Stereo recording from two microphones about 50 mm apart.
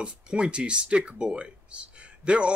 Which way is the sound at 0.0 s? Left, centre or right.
Right.